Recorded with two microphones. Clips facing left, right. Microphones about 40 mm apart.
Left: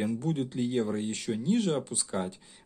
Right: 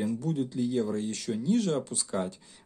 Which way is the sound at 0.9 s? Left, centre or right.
Left.